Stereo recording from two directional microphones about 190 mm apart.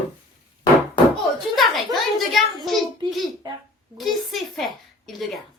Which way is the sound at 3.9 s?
Centre (ahead or behind).